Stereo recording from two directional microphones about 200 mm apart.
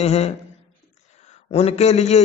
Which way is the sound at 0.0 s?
35° left (ahead or behind).